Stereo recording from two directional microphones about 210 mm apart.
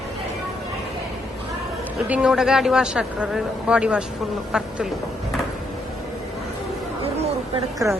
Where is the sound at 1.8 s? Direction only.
5° right (ahead or behind).